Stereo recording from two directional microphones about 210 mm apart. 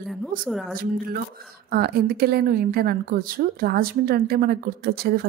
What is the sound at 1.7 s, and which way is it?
A woman's voice, 45° right (ahead or behind).